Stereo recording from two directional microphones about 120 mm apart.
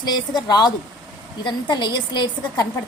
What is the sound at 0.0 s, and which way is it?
Speech, 35° left (ahead or behind).